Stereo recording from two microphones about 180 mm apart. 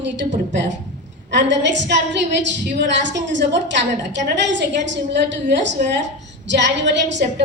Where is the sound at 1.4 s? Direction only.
80° right.